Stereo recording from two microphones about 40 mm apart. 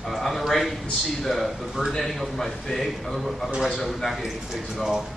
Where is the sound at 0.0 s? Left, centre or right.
Centre.